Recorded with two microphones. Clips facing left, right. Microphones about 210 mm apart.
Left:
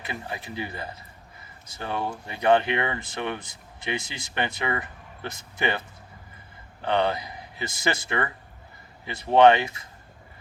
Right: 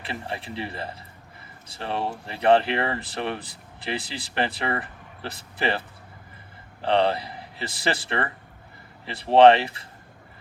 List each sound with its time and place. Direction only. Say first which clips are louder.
0.0 s speech: right 2 dB; 30° right (ahead or behind)
6.8 s speech: right 3 dB; 30° right (ahead or behind)